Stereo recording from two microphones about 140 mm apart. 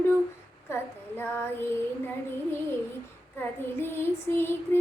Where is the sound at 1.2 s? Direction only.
15° left (ahead or behind).